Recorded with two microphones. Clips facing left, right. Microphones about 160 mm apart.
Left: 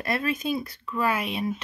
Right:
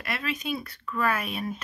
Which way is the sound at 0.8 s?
15° left (ahead or behind).